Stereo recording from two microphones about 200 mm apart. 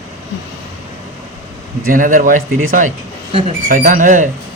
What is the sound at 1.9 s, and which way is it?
Speech, 40° right (ahead or behind).